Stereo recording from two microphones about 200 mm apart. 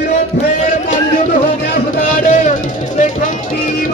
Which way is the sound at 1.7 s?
40° left (ahead or behind).